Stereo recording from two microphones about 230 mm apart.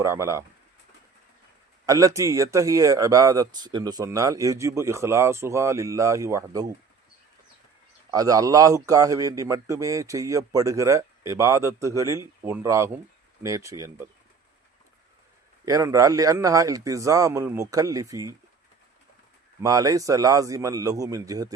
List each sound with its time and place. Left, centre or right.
0.0 s a man's voice: centre
1.9 s a man's voice: centre
8.1 s a man's voice: centre
15.6 s a man's voice: centre
19.6 s a man's voice: centre